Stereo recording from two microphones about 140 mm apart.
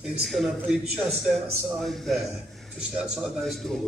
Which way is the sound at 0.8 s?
50° right (ahead or behind).